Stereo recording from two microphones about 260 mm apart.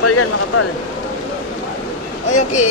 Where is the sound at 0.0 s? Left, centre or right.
Left.